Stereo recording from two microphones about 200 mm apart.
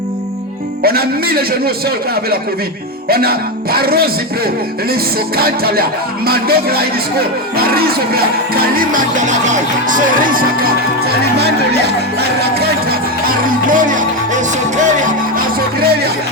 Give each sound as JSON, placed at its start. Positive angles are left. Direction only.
{"t": 0.8, "sound": "music", "side_deg": -50}
{"t": 3.1, "sound": "music", "side_deg": -50}
{"t": 5.4, "sound": "music", "side_deg": -50}
{"t": 12.4, "sound": "speech", "side_deg": -50}